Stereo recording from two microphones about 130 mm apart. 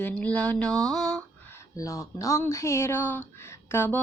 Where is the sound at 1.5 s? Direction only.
25° left (ahead or behind).